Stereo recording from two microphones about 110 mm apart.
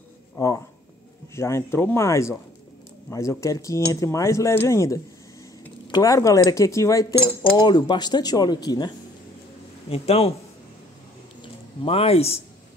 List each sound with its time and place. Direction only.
0.4 s a sound: 30° left (ahead or behind)
1.3 s speech: 25° left (ahead or behind)
5.9 s a sound: 40° left (ahead or behind)
6.1 s speech: 30° left (ahead or behind)
9.8 s speech: 65° left (ahead or behind)
11.8 s speech: 65° left (ahead or behind)